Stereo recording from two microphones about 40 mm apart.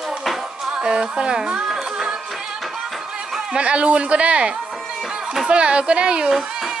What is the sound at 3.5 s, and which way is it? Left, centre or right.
A woman's voice, right.